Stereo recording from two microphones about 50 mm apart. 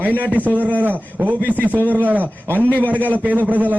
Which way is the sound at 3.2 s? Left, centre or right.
Right.